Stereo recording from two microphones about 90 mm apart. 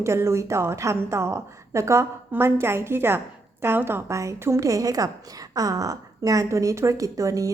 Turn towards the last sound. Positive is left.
turn(degrees=-40)  # may be behind; listen again after turning